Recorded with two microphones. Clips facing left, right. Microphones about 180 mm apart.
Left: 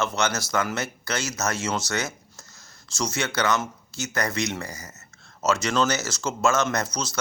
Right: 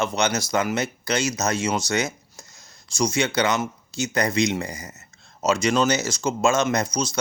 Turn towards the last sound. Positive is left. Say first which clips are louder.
# right 3 dB
turn(degrees=-15)  # may be behind; listen again after turning